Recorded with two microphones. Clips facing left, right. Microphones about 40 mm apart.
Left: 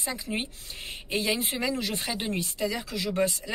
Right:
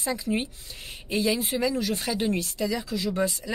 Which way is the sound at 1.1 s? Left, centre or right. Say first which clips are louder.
Right 3 dB; left.